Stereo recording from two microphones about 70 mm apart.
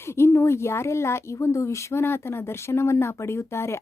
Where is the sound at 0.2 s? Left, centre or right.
Left.